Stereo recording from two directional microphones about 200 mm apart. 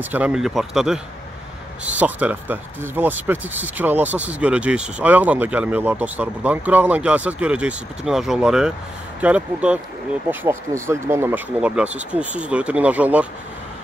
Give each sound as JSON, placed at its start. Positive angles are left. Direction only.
{"t": 0.1, "sound": "speech", "side_deg": -5}